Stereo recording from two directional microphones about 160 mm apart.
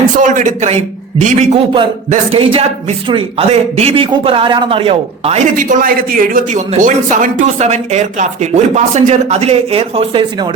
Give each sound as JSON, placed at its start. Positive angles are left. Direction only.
{"t": 0.2, "sound": "a man's voice", "side_deg": -50}
{"t": 5.5, "sound": "speech", "side_deg": -60}